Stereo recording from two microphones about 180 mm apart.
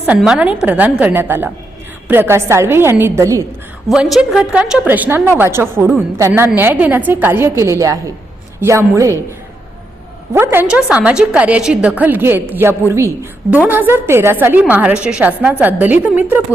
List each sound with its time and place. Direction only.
0.0 s a woman's voice: 5° right (ahead or behind)
3.8 s a woman's voice: centre (ahead or behind)
10.3 s a woman's voice: 10° right (ahead or behind)